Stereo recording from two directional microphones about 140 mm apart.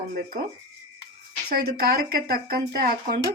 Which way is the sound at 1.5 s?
90° right.